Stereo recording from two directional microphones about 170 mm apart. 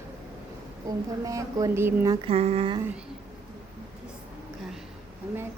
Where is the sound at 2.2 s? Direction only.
35° right (ahead or behind).